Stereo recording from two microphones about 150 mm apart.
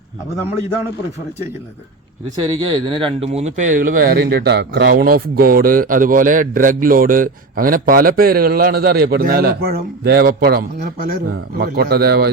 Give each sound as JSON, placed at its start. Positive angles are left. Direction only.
{"t": 2.4, "sound": "a man's voice", "side_deg": -30}